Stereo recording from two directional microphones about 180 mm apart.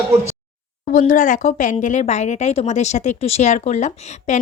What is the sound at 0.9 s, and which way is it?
Speech, 45° left (ahead or behind).